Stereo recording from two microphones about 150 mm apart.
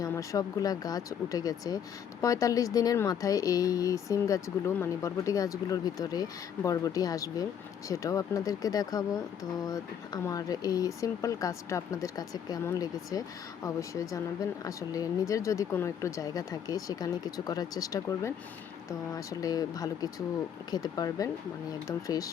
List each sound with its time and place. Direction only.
0.0 s speech: 20° left (ahead or behind)